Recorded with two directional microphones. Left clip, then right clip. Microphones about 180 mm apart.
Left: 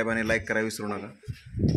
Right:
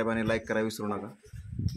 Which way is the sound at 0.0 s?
Centre (ahead or behind).